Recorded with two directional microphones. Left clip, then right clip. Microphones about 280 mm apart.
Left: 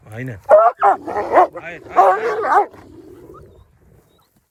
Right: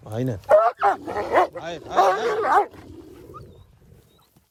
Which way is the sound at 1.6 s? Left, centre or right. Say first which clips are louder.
Even; centre.